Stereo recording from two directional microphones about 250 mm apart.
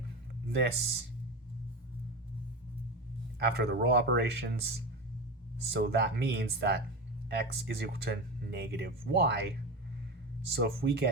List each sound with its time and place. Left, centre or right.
0.4 s a sound: right
3.3 s speech: right
5.7 s speech: right
10.5 s speech: right